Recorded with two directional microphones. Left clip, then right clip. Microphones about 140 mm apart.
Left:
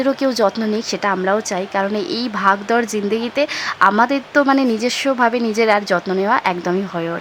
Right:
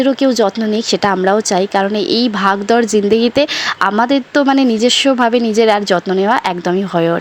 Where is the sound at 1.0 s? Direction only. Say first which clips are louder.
Right 4 dB; 30° right (ahead or behind).